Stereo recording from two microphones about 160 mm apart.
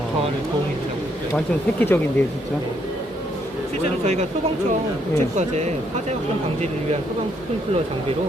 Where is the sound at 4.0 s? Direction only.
40° right (ahead or behind).